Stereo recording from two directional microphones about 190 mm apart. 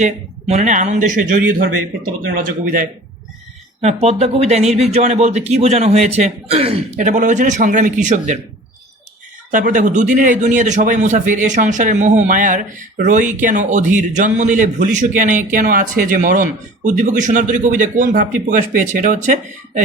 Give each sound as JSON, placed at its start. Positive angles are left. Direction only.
{"t": 0.0, "sound": "a man's voice", "side_deg": -40}
{"t": 3.8, "sound": "a man's voice", "side_deg": -35}
{"t": 6.9, "sound": "a man's voice", "side_deg": -45}
{"t": 9.5, "sound": "a man's voice", "side_deg": -45}